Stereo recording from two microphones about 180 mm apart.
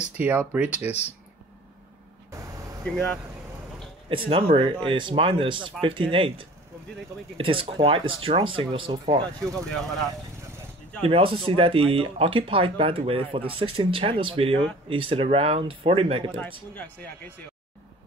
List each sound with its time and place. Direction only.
0.2 s speech: 10° right (ahead or behind)
2.3 s vehicle: 20° right (ahead or behind)
2.8 s speech: 5° left (ahead or behind)
4.1 s speech: 30° right (ahead or behind)
11.0 s speech: 30° right (ahead or behind)
16.7 s speech: 10° left (ahead or behind)